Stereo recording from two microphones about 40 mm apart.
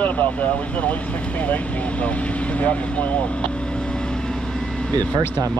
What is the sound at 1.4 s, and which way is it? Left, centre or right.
Speech, left.